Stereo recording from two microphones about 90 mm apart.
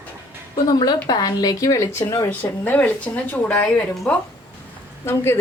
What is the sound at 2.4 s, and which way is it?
Speech, 20° left (ahead or behind).